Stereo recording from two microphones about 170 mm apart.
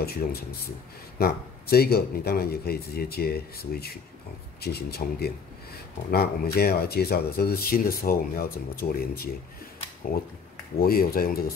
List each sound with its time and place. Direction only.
0.0 s speech: 65° left (ahead or behind)
10.8 s speech: 60° left (ahead or behind)